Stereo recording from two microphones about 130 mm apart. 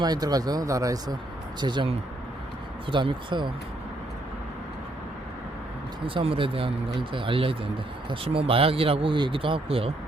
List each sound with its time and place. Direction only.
0.0 s speech: 30° right (ahead or behind)
1.6 s speech: 40° right (ahead or behind)
6.1 s speech: 45° right (ahead or behind)